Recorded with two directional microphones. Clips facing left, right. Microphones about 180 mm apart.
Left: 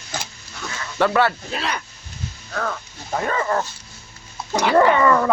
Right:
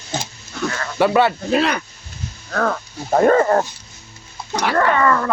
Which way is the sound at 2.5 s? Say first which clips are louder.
Right 6 dB; 55° right (ahead or behind).